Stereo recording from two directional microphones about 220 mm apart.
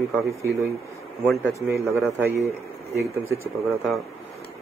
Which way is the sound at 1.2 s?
5° left (ahead or behind).